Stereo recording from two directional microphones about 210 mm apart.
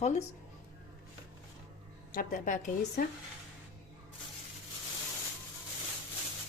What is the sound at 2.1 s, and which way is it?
Speech, 40° left (ahead or behind).